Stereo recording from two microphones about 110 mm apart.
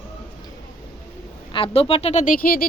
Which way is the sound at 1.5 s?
60° left (ahead or behind).